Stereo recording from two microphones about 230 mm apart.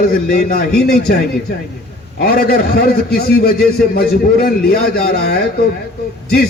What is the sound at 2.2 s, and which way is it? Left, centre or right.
A man's voice, left.